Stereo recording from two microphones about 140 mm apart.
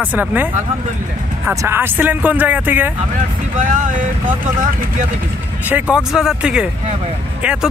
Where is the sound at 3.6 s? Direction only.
65° right (ahead or behind).